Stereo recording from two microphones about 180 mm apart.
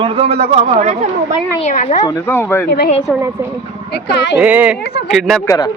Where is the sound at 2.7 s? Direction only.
65° left (ahead or behind).